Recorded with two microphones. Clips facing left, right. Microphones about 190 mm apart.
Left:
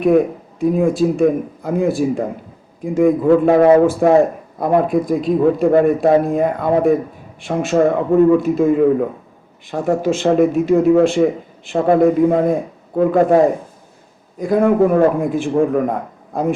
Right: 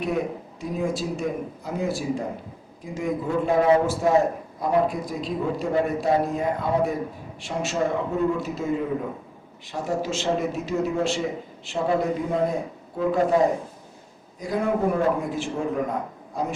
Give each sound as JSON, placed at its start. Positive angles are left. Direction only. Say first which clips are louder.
{"t": 0.6, "sound": "a man's voice", "louder": "left 12 dB", "side_deg": 55}